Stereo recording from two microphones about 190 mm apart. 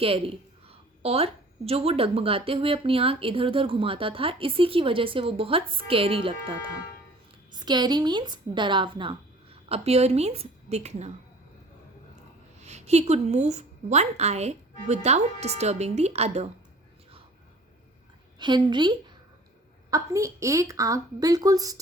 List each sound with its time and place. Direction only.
0.0 s a woman's voice: 30° right (ahead or behind)
12.5 s a woman's voice: 35° right (ahead or behind)
18.3 s a woman's voice: 25° right (ahead or behind)